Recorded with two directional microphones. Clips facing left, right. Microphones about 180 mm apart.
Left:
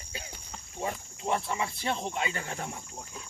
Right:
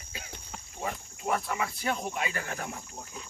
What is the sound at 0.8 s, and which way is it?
Speech, 25° left (ahead or behind).